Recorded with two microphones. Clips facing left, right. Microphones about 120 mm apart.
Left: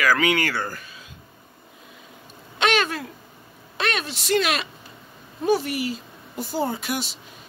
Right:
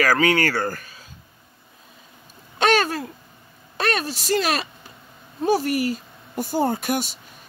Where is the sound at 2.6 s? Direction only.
40° right (ahead or behind).